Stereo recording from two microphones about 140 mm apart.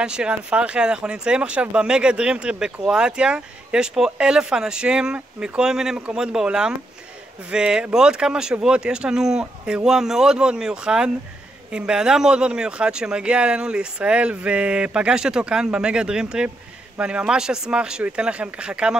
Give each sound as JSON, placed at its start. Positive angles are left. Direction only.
{"t": 0.0, "sound": "speech", "side_deg": -5}